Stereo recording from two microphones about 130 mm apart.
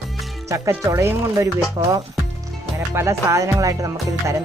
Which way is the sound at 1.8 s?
35° right (ahead or behind).